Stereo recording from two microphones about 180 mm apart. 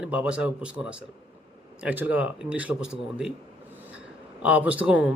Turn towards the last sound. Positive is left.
turn(degrees=-5)  # may be behind; listen again after turning